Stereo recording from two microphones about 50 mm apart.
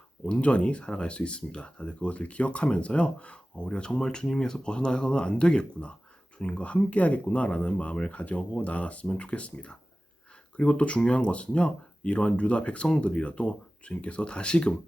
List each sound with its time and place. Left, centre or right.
0.3 s speech: left